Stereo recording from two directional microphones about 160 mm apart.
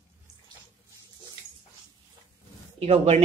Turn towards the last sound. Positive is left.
turn(degrees=-40)  # may be behind; listen again after turning